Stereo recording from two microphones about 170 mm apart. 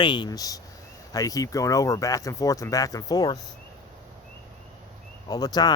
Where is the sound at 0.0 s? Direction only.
25° left (ahead or behind).